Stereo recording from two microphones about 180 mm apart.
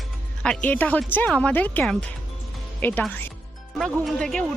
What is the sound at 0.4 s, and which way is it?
Speech, 5° left (ahead or behind).